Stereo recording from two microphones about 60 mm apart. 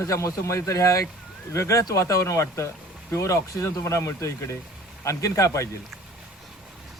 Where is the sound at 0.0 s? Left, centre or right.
Left.